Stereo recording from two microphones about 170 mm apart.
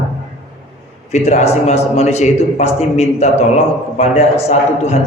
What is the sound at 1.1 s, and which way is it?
A man's voice, 40° left (ahead or behind).